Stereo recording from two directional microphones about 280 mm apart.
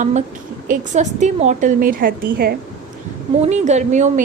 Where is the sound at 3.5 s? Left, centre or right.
Right.